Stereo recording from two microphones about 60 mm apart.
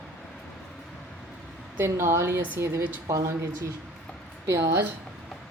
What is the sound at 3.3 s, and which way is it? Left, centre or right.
Speech, right.